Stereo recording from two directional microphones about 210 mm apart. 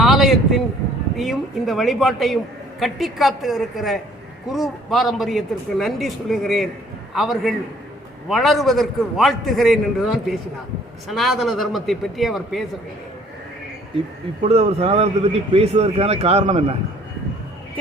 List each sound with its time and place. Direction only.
0.0 s a sound: centre (ahead or behind)
1.1 s a man's voice: centre (ahead or behind)
14.4 s a man's voice: 30° right (ahead or behind)